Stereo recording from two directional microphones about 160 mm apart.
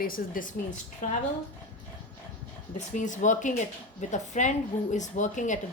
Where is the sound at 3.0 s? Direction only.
50° left (ahead or behind).